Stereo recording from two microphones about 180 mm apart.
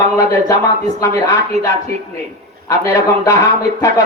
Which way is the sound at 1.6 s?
40° right (ahead or behind).